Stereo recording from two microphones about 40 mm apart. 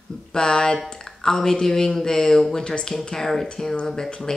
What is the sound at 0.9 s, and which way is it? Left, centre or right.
Speech, centre.